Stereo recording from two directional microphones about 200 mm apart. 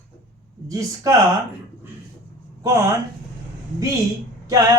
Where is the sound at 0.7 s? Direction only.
15° right (ahead or behind).